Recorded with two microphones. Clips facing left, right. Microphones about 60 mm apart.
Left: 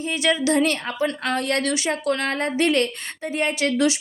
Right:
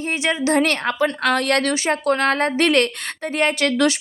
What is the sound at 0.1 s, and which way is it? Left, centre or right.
Speech, right.